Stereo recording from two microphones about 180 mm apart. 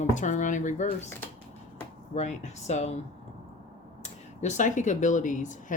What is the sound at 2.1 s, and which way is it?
Speech, 40° left (ahead or behind).